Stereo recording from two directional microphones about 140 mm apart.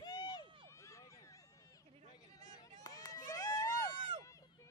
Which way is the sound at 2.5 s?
25° left (ahead or behind).